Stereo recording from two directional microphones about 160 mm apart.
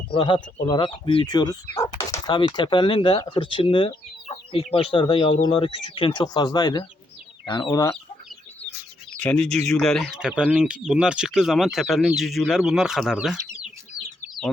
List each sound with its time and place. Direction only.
0.1 s speech: 30° left (ahead or behind)
9.1 s speech: 5° left (ahead or behind)